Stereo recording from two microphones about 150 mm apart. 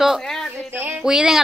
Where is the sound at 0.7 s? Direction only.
15° right (ahead or behind).